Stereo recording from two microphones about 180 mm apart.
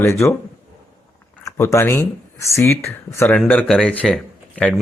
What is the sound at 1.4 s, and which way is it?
Speech, 15° left (ahead or behind).